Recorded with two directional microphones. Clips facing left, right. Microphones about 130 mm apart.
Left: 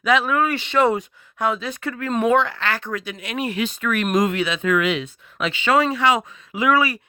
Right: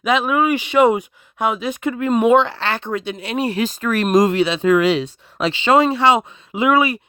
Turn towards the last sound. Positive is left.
turn(degrees=-20)  # may be behind; listen again after turning